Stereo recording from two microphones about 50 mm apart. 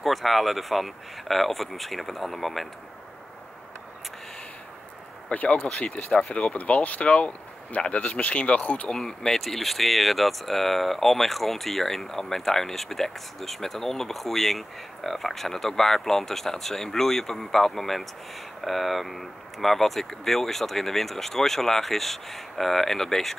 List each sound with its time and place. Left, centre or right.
0.0 s speech: centre
5.3 s speech: left
8.9 s speech: centre